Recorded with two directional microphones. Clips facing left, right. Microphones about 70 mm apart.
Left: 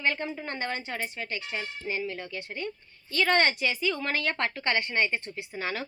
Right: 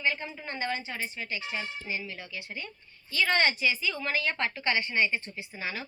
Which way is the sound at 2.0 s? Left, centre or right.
Left.